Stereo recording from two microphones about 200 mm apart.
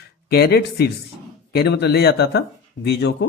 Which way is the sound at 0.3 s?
50° left (ahead or behind).